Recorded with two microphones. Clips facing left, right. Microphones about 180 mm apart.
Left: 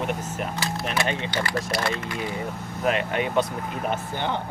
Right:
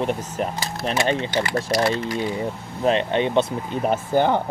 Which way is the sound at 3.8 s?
45° right (ahead or behind).